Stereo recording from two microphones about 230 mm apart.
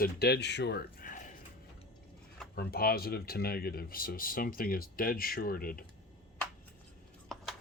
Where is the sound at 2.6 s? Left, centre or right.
Left.